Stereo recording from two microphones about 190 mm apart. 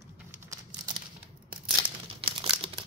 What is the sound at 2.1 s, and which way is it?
Crumpling, 30° right (ahead or behind).